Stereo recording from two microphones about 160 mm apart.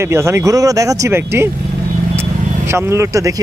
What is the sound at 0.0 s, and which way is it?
Speech, 15° right (ahead or behind).